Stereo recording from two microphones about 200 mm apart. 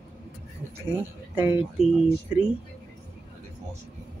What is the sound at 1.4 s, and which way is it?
Speech, 10° right (ahead or behind).